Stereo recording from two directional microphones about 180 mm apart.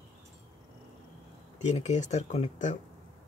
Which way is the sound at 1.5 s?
40° left (ahead or behind).